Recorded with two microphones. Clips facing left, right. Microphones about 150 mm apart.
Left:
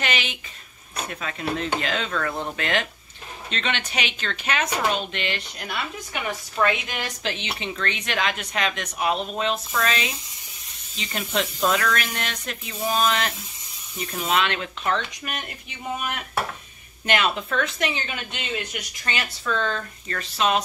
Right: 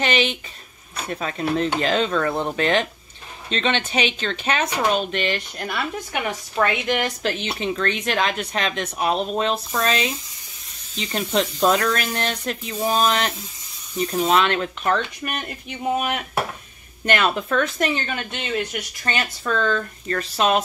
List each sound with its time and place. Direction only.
0.0 s a sound: 30° right (ahead or behind)
1.0 s speech: 35° right (ahead or behind)
6.6 s speech: 55° right (ahead or behind)